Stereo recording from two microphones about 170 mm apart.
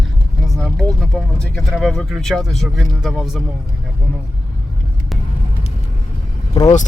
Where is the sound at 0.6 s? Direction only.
5° left (ahead or behind).